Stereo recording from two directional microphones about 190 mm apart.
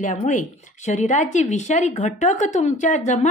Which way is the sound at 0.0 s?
40° left (ahead or behind).